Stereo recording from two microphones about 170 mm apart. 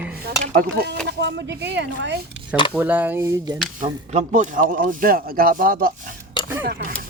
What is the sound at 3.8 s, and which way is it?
Speech, 45° right (ahead or behind).